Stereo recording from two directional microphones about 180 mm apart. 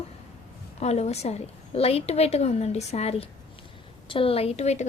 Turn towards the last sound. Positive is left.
turn(degrees=35)  # may be behind; listen again after turning